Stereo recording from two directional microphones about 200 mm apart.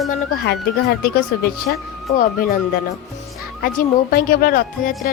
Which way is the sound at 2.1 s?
45° left (ahead or behind).